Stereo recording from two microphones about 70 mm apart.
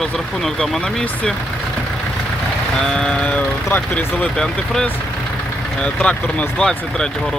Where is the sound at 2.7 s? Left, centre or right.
Centre.